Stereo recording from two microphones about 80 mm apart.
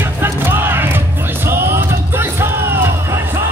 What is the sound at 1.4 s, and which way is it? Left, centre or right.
Music, right.